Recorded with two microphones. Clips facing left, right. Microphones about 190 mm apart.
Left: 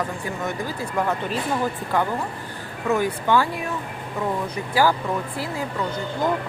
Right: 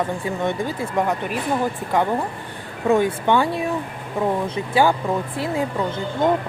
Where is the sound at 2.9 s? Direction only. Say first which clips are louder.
Right 3 dB; 25° right (ahead or behind).